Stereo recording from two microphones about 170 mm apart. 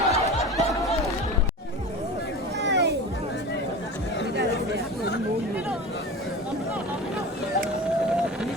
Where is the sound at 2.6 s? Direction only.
85° right.